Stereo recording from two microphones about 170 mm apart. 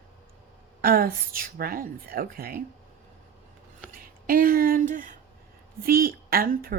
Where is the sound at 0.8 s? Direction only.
60° right (ahead or behind).